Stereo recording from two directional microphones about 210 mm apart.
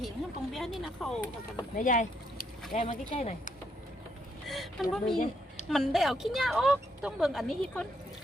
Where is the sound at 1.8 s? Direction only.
40° left (ahead or behind).